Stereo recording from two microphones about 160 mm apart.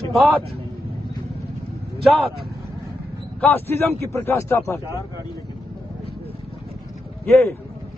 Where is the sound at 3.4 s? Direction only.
15° left (ahead or behind).